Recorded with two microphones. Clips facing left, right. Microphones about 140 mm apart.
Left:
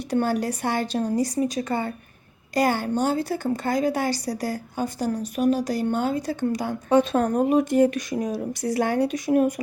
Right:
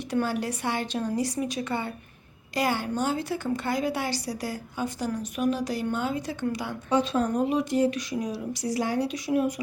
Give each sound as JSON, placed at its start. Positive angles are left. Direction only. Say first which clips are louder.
{"t": 0.1, "sound": "a woman's voice", "louder": "left 4 dB", "side_deg": 40}